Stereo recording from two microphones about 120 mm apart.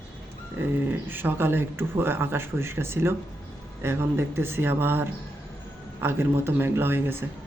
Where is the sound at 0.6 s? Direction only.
15° right (ahead or behind).